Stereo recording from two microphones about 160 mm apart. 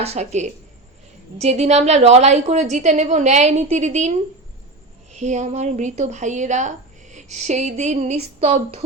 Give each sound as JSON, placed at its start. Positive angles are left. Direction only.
{"t": 0.0, "sound": "a woman's voice", "side_deg": -40}
{"t": 5.1, "sound": "a woman's voice", "side_deg": -50}